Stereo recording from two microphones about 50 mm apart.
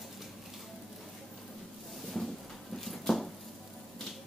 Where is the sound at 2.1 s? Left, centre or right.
Centre.